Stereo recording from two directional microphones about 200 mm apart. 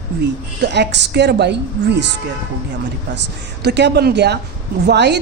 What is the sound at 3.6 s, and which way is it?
A woman's voice, 60° right (ahead or behind).